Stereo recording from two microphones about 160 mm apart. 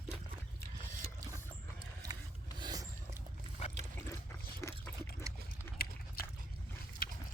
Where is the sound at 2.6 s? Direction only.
25° right (ahead or behind).